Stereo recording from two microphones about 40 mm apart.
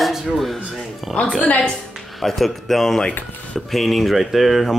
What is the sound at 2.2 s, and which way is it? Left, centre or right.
Speech, centre.